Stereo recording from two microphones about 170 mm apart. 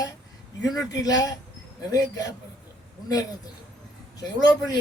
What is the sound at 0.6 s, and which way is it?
Speech, 20° left (ahead or behind).